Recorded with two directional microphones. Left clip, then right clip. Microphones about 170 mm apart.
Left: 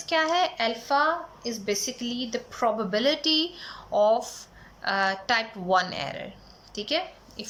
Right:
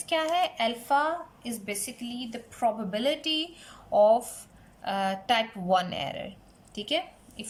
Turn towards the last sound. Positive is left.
turn(degrees=-20)  # may be behind; listen again after turning